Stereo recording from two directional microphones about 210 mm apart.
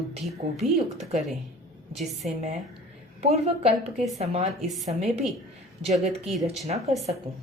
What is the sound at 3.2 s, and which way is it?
A woman's voice, 30° right (ahead or behind).